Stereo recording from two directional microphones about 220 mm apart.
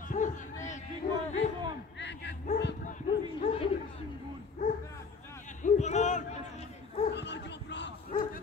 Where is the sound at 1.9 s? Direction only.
50° left (ahead or behind).